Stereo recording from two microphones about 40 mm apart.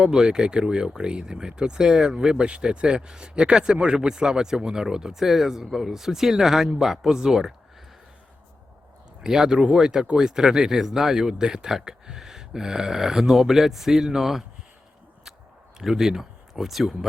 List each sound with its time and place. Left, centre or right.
0.0 s speech: centre
9.2 s speech: centre
15.8 s speech: centre